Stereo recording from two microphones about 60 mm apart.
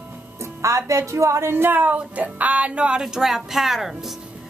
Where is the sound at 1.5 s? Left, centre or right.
Right; by 3.0 s centre.